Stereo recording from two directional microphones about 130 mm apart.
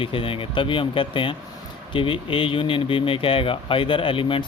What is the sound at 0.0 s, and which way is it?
Speech, 45° left (ahead or behind).